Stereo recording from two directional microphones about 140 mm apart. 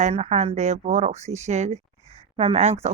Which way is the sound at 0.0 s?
55° right (ahead or behind).